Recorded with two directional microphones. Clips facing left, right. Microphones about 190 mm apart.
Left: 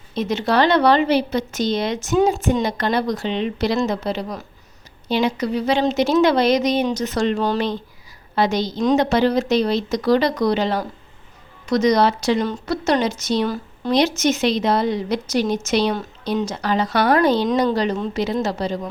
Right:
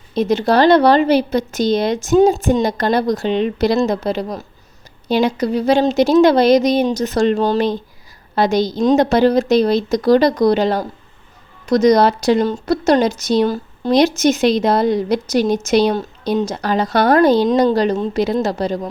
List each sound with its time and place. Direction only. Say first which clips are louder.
0.1 s a woman's voice: right 5 dB; 35° right (ahead or behind)